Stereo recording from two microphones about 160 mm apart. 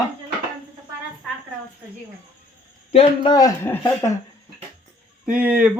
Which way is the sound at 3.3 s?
20° left (ahead or behind).